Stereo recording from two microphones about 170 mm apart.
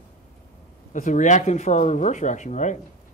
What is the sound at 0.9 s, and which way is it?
A man's voice, 45° left (ahead or behind).